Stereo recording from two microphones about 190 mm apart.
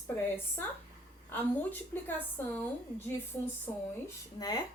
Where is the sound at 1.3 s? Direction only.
10° left (ahead or behind).